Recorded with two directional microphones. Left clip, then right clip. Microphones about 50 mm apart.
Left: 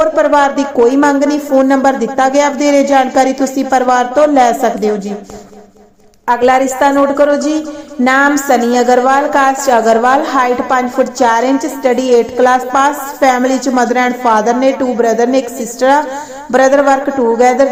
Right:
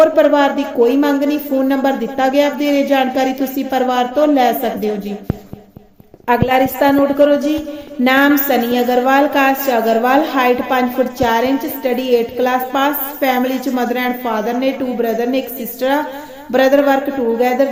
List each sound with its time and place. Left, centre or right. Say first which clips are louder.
0.0 s a man's voice: left 1 dB; left
6.2 s a man's voice: left 4 dB; left